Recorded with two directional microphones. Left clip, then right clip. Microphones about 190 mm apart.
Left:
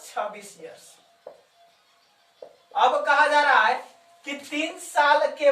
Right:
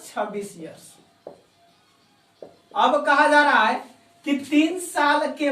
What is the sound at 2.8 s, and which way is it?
A woman's voice, centre (ahead or behind).